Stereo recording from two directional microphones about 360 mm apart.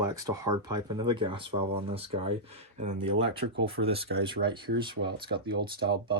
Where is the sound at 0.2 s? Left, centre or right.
Centre.